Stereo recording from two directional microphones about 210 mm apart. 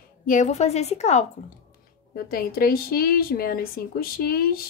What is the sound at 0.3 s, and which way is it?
Speech, 35° left (ahead or behind).